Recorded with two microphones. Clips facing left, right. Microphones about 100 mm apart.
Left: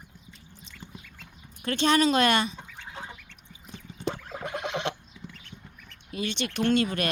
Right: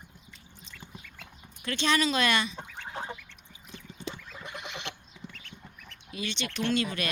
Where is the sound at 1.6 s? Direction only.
45° left (ahead or behind).